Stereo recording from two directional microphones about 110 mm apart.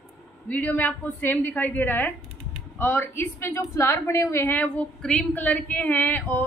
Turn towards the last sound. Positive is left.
turn(degrees=20)  # may be behind; listen again after turning